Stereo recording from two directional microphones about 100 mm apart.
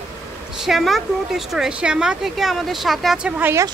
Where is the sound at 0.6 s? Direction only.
Centre (ahead or behind).